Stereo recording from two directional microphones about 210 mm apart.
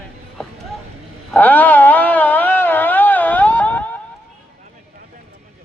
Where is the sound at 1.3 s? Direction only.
5° left (ahead or behind).